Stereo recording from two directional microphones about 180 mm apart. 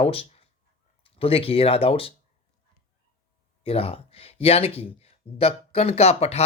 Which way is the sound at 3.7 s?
30° left (ahead or behind).